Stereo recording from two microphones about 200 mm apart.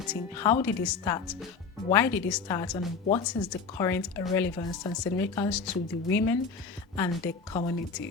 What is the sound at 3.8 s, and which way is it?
Speech, 15° left (ahead or behind).